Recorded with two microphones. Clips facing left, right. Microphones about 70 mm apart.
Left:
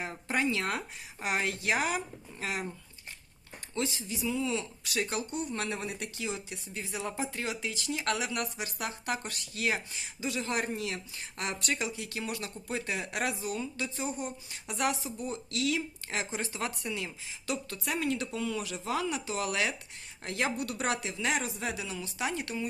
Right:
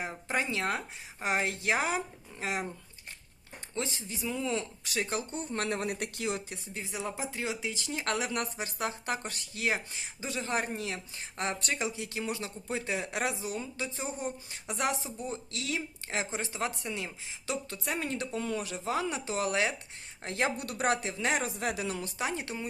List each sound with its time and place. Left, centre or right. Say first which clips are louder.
0.0 s speech: left 2 dB; right
4.1 s speech: even; right
4.9 s speech: left 1 dB; right
5.5 s speech: right 3 dB; right
6.7 s speech: left 1 dB; right
7.7 s speech: left 1 dB; right
22.2 s speech: left 3 dB; right